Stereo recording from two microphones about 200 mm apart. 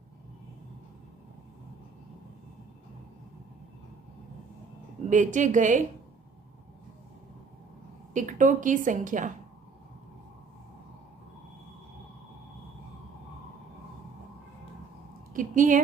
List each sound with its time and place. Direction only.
5.0 s a woman's voice: 40° right (ahead or behind)
8.1 s a woman's voice: 40° right (ahead or behind)
15.3 s speech: 40° right (ahead or behind)